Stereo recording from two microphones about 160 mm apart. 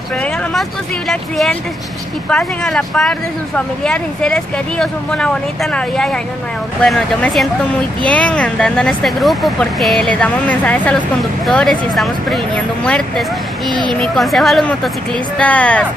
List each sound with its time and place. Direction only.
0.2 s speech: centre (ahead or behind)
13.7 s speech: 30° right (ahead or behind)
13.9 s speech: centre (ahead or behind)